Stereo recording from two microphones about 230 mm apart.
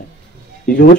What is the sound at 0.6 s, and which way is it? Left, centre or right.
Speech, left.